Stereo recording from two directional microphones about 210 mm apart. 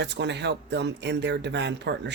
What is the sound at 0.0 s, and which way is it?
Speech, 55° right (ahead or behind).